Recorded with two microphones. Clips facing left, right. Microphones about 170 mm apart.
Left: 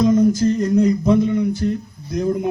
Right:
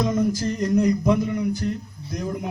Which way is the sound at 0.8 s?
30° left (ahead or behind).